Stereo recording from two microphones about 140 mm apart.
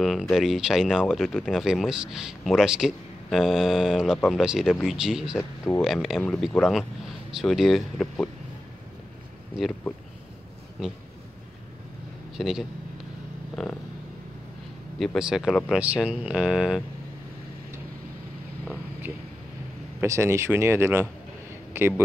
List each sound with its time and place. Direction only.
0.0 s speech: centre (ahead or behind)
12.4 s speech: centre (ahead or behind)
15.0 s speech: 5° right (ahead or behind)
20.0 s speech: 20° right (ahead or behind)